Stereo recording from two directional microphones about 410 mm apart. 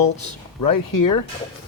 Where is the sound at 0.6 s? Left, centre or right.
Left.